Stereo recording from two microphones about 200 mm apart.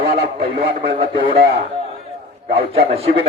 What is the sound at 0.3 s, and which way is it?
Speech, 30° right (ahead or behind).